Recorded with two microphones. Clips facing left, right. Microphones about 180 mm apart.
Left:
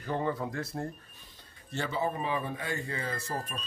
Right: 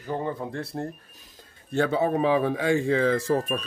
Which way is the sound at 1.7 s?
60° right (ahead or behind).